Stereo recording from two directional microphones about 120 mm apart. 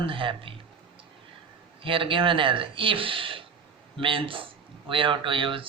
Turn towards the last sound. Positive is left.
turn(degrees=-45)  # may be behind; listen again after turning